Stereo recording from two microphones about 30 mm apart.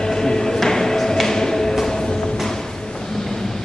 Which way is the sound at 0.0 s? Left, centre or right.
Centre.